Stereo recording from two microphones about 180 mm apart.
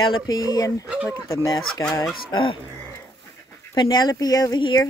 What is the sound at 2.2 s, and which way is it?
Speech, 25° left (ahead or behind).